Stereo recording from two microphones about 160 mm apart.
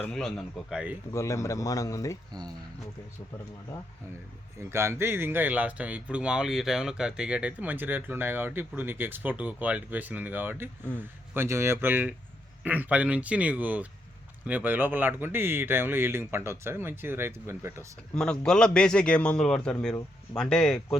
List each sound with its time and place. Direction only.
0.0 s a man's voice: 5° left (ahead or behind)
1.1 s speech: 20° left (ahead or behind)
4.7 s speech: 15° right (ahead or behind)
18.1 s a man's voice: 5° left (ahead or behind)